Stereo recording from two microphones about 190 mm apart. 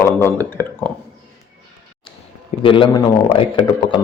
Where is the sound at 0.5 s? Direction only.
10° left (ahead or behind).